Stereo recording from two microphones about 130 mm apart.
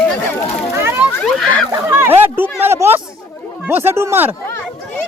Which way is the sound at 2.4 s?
15° right (ahead or behind).